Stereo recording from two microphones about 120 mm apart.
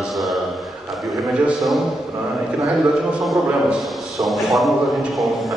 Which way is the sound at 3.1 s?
5° right (ahead or behind).